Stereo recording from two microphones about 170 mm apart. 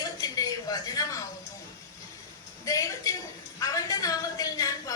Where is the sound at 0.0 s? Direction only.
20° left (ahead or behind).